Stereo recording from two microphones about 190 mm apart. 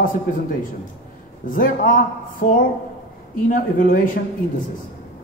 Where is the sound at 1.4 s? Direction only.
45° left (ahead or behind).